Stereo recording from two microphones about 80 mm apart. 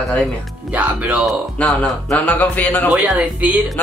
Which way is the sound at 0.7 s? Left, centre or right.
Centre.